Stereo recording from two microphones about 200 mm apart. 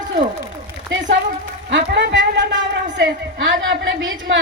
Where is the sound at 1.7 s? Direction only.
60° right (ahead or behind).